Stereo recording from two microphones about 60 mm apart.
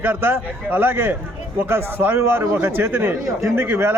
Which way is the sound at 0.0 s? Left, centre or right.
Right.